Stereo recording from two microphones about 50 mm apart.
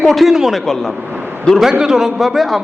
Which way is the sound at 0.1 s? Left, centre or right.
Centre.